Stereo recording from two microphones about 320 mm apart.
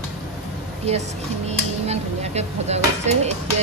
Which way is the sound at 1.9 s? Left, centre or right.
Centre.